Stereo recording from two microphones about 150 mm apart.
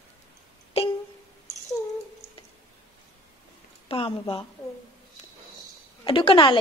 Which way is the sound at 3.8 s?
35° left (ahead or behind).